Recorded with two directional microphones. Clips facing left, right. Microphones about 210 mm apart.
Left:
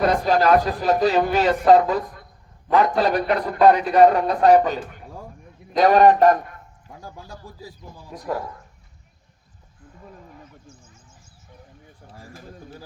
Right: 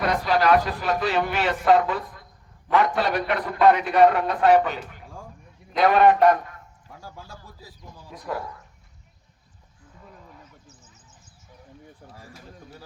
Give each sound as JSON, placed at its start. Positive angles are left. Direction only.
{"t": 0.0, "sound": "a man's voice", "side_deg": 40}
{"t": 8.1, "sound": "a man's voice", "side_deg": 40}